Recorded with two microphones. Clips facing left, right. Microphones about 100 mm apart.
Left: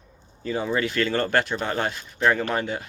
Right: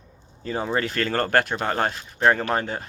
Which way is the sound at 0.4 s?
35° right (ahead or behind).